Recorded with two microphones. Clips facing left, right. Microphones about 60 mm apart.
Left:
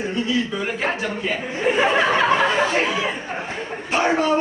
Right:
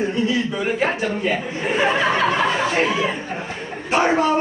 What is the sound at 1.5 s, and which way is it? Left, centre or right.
Speech, left.